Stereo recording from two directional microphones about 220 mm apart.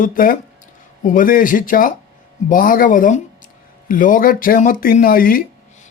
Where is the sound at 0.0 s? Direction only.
40° left (ahead or behind).